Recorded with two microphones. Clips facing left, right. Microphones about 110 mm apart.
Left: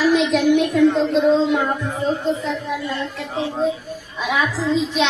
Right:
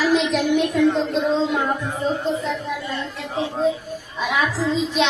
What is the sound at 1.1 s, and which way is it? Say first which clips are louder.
Speech: left 4 dB; centre (ahead or behind).